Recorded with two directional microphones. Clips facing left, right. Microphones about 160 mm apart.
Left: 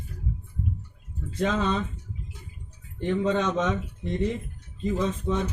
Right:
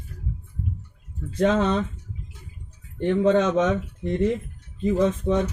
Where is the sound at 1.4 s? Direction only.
60° right (ahead or behind).